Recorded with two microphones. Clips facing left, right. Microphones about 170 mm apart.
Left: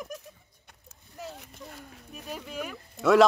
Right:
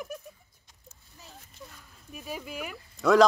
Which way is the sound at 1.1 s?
70° left (ahead or behind).